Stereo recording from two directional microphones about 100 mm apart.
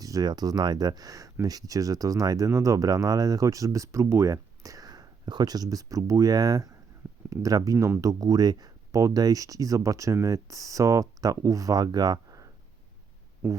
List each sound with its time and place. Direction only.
0.0 s speech: 40° right (ahead or behind)
13.4 s speech: 20° right (ahead or behind)